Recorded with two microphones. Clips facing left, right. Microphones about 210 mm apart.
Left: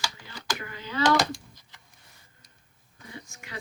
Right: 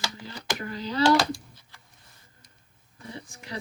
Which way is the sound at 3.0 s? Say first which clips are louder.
Right 3 dB; 35° right (ahead or behind).